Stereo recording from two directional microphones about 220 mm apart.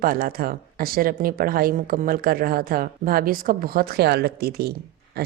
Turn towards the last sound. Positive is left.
turn(degrees=-45)  # may be behind; listen again after turning